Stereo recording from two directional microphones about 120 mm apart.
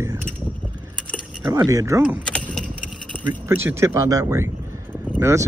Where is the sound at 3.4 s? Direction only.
20° right (ahead or behind).